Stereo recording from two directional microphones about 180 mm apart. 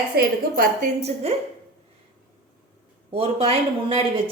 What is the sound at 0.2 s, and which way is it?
Speech, 55° right (ahead or behind).